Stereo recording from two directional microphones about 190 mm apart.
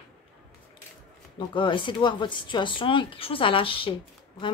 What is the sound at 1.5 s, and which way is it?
Speech, 25° left (ahead or behind).